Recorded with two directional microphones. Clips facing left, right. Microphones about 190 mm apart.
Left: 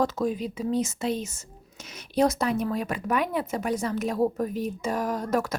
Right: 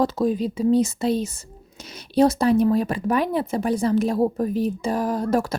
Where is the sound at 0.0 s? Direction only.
30° right (ahead or behind).